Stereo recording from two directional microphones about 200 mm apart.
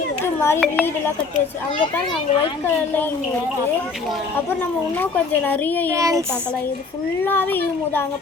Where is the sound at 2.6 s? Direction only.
10° left (ahead or behind).